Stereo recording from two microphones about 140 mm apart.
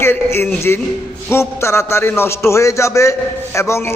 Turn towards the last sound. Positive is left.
turn(degrees=20)  # may be behind; listen again after turning